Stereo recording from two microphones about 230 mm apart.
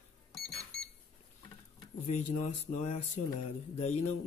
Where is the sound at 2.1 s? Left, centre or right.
Left.